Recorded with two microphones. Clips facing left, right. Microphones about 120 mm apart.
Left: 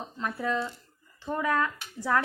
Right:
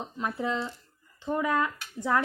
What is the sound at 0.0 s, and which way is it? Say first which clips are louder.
A woman's voice: right 1 dB; 20° right (ahead or behind).